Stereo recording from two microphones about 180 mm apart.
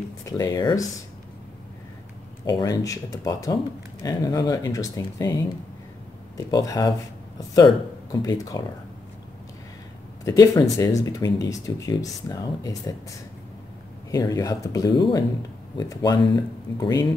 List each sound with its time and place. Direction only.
0.2 s speech: 20° left (ahead or behind)
2.4 s speech: 20° left (ahead or behind)
10.2 s speech: 20° left (ahead or behind)
14.1 s speech: 20° left (ahead or behind)